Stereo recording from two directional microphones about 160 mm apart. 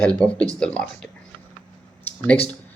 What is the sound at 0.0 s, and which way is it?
Speech, 5° left (ahead or behind).